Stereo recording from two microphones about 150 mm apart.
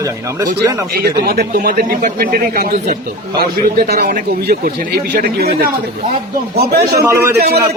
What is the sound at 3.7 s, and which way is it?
A man's voice, 90° right.